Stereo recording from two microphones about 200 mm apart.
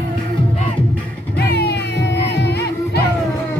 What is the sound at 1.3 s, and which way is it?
Music, 55° left (ahead or behind).